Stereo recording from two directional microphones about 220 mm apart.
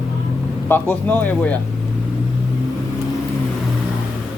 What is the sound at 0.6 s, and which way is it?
Speech, 10° left (ahead or behind).